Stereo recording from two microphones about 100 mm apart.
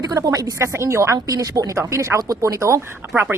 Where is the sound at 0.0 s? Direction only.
35° right (ahead or behind).